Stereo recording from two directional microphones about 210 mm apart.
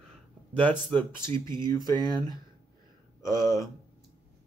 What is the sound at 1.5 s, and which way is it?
Speech, 20° right (ahead or behind).